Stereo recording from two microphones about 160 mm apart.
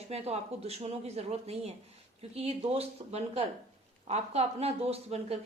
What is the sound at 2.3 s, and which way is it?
A woman's voice, 40° right (ahead or behind).